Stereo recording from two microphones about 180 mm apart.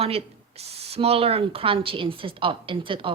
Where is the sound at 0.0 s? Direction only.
35° right (ahead or behind).